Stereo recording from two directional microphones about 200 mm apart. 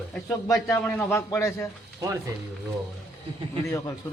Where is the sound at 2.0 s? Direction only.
15° right (ahead or behind).